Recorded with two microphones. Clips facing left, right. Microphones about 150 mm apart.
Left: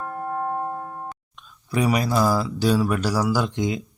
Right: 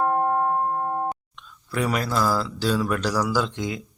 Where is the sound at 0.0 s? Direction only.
60° right (ahead or behind).